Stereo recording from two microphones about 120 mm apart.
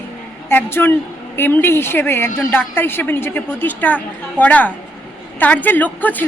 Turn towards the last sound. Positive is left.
turn(degrees=15)  # may be behind; listen again after turning